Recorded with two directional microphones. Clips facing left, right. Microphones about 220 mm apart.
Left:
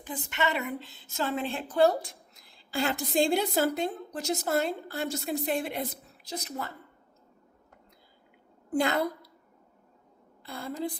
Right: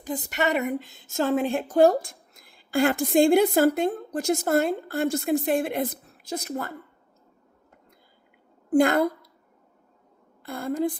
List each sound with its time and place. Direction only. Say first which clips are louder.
0.0 s a woman's voice: right 5 dB; 40° right (ahead or behind)
8.8 s a woman's voice: right 7 dB; 50° right (ahead or behind)
10.4 s a woman's voice: right 8 dB; 50° right (ahead or behind)